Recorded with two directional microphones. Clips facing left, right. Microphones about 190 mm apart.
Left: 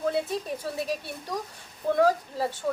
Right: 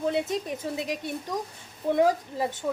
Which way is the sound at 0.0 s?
20° right (ahead or behind).